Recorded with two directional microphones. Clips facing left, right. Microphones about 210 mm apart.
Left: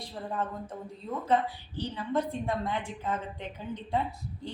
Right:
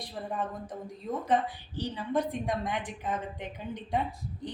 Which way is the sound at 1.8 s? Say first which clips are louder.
Even; 15° right (ahead or behind).